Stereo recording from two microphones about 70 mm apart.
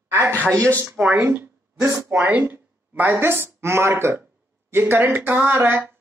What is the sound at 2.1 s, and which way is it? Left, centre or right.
A woman's voice, right.